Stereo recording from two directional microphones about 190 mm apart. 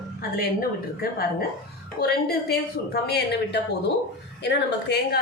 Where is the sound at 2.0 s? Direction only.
55° left (ahead or behind).